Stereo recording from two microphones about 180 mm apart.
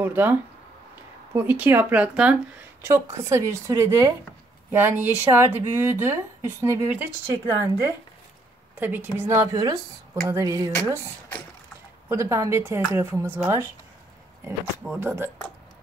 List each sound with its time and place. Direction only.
0.0 s a woman's voice: 10° right (ahead or behind)
14.9 s a woman's voice: 15° right (ahead or behind)